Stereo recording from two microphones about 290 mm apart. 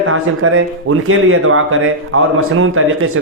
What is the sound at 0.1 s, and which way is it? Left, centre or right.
A man's voice, right.